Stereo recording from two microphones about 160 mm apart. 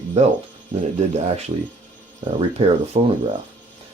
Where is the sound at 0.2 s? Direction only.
45° right (ahead or behind).